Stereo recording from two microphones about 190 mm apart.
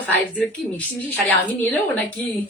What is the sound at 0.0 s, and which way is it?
A woman's voice, 5° left (ahead or behind).